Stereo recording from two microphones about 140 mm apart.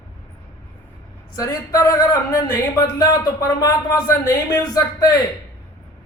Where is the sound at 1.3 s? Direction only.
25° left (ahead or behind).